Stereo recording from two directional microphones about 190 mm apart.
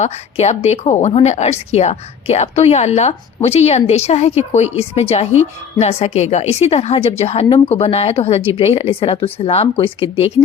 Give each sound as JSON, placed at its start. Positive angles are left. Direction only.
{"t": 0.0, "sound": "a woman's voice", "side_deg": 35}